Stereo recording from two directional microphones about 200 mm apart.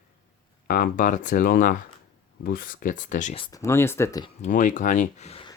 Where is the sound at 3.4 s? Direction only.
15° left (ahead or behind).